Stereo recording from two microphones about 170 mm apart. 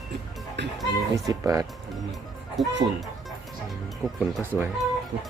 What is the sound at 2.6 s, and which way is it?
Speech, centre (ahead or behind).